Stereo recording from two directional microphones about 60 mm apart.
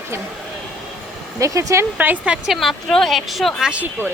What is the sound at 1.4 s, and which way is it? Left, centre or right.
Speech, right.